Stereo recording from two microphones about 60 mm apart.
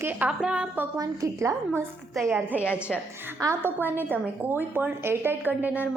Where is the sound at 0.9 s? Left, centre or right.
Right.